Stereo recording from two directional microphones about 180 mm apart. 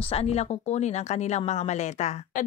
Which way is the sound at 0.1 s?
35° left (ahead or behind).